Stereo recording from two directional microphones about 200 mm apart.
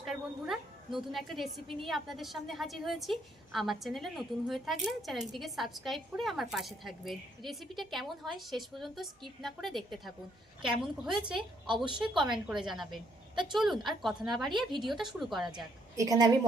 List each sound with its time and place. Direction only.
0.0 s a woman's voice: centre (ahead or behind)
11.3 s a woman's voice: 25° right (ahead or behind)
12.5 s a woman's voice: centre (ahead or behind)
16.0 s a woman's voice: 20° right (ahead or behind)